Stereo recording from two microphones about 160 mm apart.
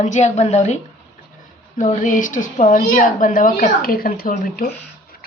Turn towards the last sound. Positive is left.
turn(degrees=60)  # may be behind; listen again after turning